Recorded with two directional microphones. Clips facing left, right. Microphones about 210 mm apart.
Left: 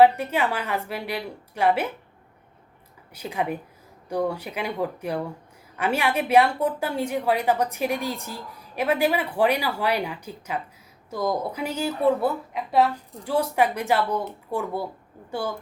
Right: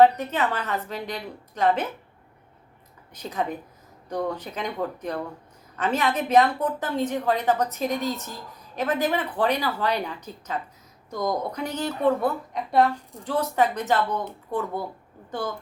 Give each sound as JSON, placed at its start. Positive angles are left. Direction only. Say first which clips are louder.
{"t": 0.0, "sound": "a woman's voice", "louder": "left 1 dB", "side_deg": 10}
{"t": 3.2, "sound": "a woman's voice", "louder": "left 1 dB", "side_deg": 10}